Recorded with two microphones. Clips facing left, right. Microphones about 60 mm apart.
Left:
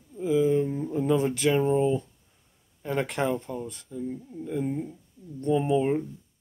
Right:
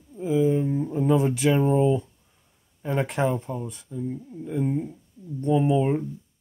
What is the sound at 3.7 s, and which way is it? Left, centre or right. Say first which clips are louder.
Speech: right 2 dB; centre.